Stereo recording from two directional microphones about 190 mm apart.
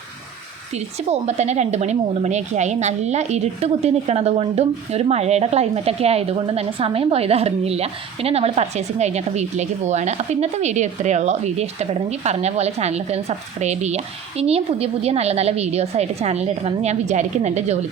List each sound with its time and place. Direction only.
1.3 s a woman's voice: 35° right (ahead or behind)